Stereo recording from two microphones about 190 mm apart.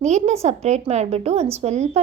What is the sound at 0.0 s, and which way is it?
A woman's voice, 35° right (ahead or behind).